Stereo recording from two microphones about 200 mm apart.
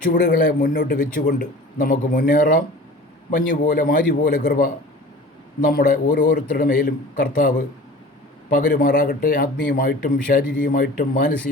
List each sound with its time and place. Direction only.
0.1 s a man's voice: 60° left (ahead or behind)
0.9 s a man's voice: 40° left (ahead or behind)
6.1 s a man's voice: 60° left (ahead or behind)
6.6 s speech: 45° left (ahead or behind)
8.4 s a man's voice: 45° left (ahead or behind)